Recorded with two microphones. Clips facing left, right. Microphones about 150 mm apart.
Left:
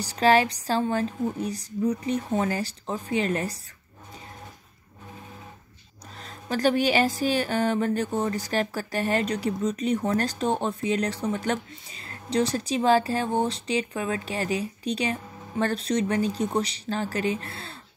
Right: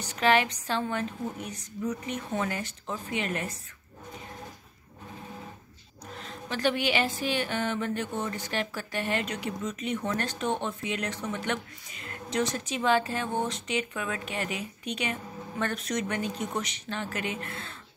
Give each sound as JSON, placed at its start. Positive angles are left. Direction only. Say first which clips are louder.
{"t": 0.0, "sound": "speech", "louder": "left 4 dB", "side_deg": 35}
{"t": 6.1, "sound": "speech", "louder": "left 5 dB", "side_deg": 40}